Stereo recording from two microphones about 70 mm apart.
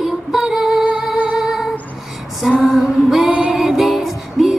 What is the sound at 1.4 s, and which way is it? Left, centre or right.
Humming, centre.